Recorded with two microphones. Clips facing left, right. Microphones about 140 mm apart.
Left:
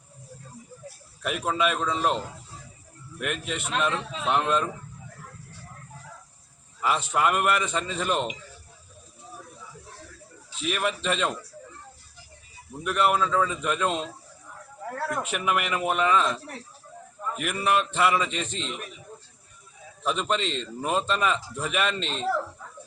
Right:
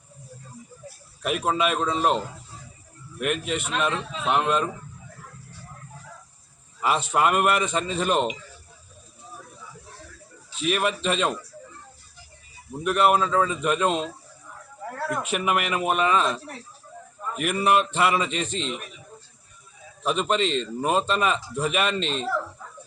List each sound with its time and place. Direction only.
1.2 s a man's voice: 15° right (ahead or behind)
6.8 s a man's voice: 20° right (ahead or behind)
10.6 s a man's voice: 20° right (ahead or behind)
12.8 s a man's voice: 20° right (ahead or behind)
15.2 s a man's voice: 20° right (ahead or behind)
20.1 s a man's voice: 15° right (ahead or behind)